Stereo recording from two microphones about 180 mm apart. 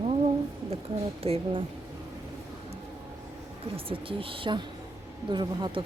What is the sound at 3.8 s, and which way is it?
Speech, 30° right (ahead or behind).